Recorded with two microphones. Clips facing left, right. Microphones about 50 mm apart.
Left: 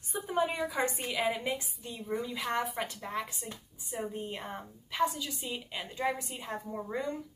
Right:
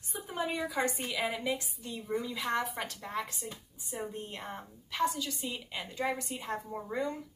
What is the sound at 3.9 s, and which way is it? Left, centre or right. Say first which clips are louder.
A woman's voice: left 2 dB; centre.